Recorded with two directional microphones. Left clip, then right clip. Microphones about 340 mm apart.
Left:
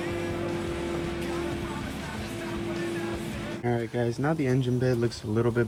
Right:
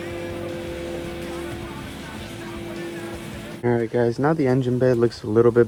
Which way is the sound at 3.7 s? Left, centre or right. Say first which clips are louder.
Right 9 dB; right.